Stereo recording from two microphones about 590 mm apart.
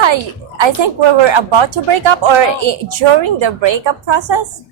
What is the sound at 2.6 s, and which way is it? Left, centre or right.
Speech, right.